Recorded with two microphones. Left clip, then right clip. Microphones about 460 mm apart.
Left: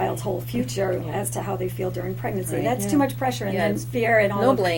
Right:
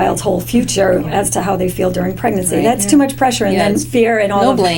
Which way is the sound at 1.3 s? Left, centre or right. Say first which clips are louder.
Right 12 dB; right.